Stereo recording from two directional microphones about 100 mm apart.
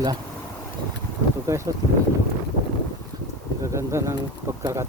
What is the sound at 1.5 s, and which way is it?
Speech, 30° right (ahead or behind).